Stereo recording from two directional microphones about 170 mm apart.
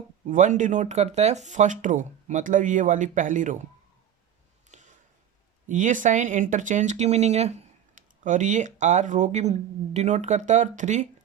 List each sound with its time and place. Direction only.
0.3 s speech: 50° right (ahead or behind)
4.7 s a sound: 45° right (ahead or behind)
5.6 s speech: 50° right (ahead or behind)